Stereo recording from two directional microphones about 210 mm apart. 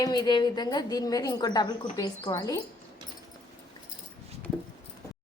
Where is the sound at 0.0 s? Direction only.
20° left (ahead or behind).